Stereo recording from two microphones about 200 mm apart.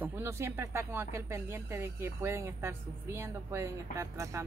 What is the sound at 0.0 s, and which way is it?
Speech, 15° right (ahead or behind).